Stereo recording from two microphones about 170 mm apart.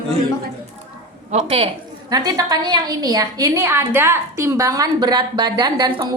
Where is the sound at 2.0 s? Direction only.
20° right (ahead or behind).